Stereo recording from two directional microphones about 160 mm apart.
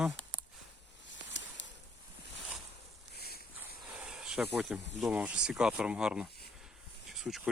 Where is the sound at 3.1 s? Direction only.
75° left (ahead or behind).